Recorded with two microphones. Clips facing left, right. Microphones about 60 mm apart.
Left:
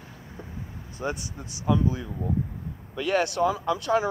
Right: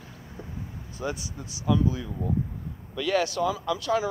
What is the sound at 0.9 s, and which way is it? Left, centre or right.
Speech, left.